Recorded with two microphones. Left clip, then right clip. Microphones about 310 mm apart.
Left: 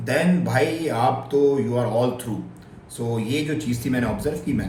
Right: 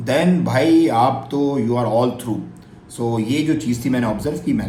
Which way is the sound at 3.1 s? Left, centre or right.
Centre.